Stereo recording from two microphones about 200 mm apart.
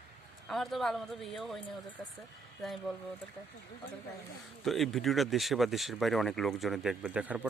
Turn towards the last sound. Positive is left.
turn(degrees=-5)  # may be behind; listen again after turning